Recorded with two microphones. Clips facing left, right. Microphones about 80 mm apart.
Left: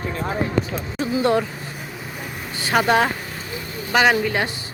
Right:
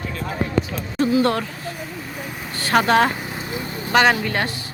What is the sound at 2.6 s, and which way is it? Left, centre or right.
Speech, centre.